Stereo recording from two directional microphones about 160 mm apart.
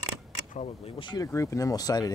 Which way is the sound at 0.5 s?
40° left (ahead or behind).